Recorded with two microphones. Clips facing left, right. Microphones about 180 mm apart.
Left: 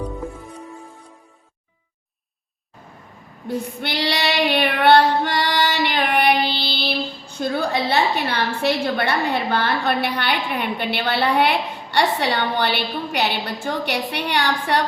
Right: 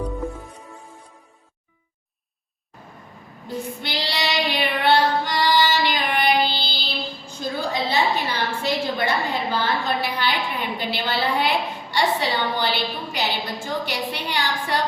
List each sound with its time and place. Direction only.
0.1 s music: centre (ahead or behind)
3.4 s child singing: 60° left (ahead or behind)
7.7 s a woman's voice: 65° left (ahead or behind)